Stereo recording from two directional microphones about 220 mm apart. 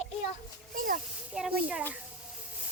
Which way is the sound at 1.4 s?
5° right (ahead or behind).